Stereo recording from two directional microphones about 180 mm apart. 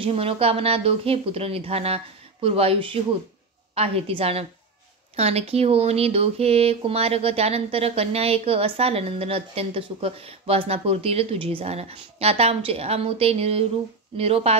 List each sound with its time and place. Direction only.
0.0 s speech: 30° right (ahead or behind)